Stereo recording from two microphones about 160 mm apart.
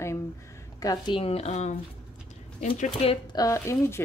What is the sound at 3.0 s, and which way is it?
Speech, 35° left (ahead or behind).